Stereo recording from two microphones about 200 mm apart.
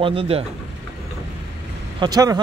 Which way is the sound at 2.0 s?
20° right (ahead or behind).